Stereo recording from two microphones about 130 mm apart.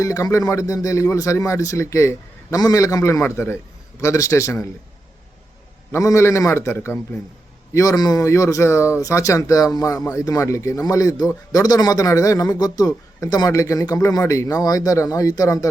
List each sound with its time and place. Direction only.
0.0 s speech: 25° left (ahead or behind)
5.9 s speech: 25° left (ahead or behind)